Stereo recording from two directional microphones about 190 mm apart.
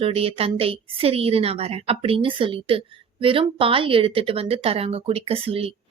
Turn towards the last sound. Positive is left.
turn(degrees=-30)  # may be behind; listen again after turning